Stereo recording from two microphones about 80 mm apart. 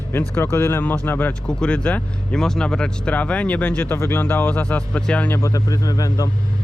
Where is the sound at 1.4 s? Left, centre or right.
Centre.